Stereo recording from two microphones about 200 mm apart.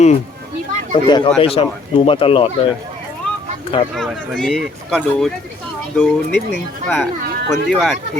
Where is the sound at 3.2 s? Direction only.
5° left (ahead or behind).